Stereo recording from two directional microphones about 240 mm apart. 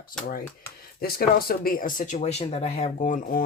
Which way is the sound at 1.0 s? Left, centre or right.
Left.